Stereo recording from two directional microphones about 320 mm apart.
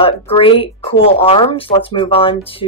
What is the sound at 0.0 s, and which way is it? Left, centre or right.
Speech, centre.